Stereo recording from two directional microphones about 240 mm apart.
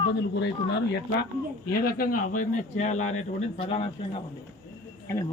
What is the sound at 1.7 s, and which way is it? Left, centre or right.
Speech, left.